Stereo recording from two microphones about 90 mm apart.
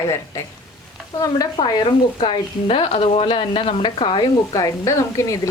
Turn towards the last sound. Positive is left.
turn(degrees=35)  # may be behind; listen again after turning